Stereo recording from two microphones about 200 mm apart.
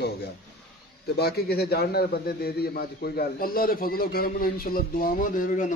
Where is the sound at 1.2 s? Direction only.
50° left (ahead or behind).